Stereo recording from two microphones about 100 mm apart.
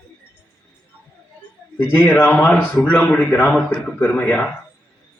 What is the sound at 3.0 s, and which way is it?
A man's voice, 15° left (ahead or behind).